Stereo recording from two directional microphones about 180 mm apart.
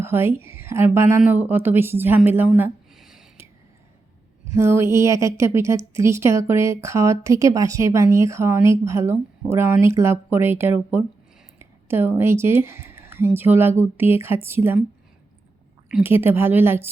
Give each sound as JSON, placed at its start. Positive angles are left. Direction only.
{"t": 0.0, "sound": "a woman's voice", "side_deg": -15}
{"t": 2.6, "sound": "a sound", "side_deg": -5}
{"t": 4.5, "sound": "a woman's voice", "side_deg": -15}
{"t": 16.0, "sound": "a woman's voice", "side_deg": -10}